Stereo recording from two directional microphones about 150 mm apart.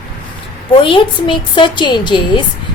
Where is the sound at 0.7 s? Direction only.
35° left (ahead or behind).